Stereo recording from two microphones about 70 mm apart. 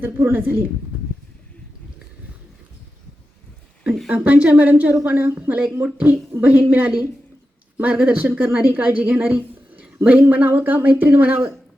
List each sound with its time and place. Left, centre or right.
0.0 s a woman's voice: right
4.1 s a woman's voice: centre
8.3 s a woman's voice: right
8.5 s a woman's voice: centre